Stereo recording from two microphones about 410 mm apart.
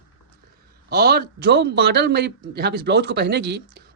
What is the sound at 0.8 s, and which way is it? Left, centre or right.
A man's voice, right.